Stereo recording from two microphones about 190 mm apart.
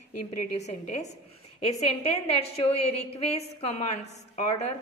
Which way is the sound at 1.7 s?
35° left (ahead or behind).